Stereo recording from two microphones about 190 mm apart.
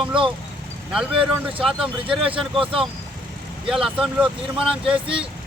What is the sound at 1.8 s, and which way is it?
Speech, 30° right (ahead or behind).